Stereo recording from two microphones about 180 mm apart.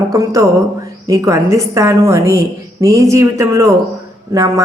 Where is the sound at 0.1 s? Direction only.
20° right (ahead or behind).